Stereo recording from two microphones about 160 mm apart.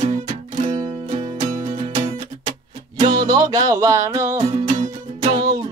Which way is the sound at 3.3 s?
25° right (ahead or behind).